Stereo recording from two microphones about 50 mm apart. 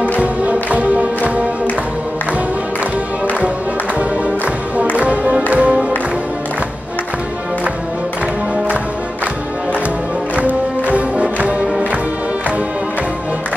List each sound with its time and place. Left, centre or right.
0.2 s music: right
4.9 s music: right
10.3 s music: right